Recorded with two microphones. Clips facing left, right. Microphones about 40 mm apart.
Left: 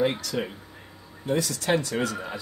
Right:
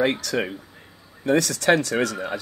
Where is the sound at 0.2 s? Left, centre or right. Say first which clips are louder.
Right 5 dB; right.